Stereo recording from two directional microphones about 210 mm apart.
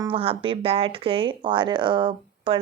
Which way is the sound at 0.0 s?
25° right (ahead or behind).